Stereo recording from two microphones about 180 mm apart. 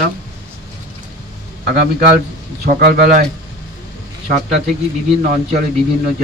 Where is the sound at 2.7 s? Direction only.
50° right (ahead or behind).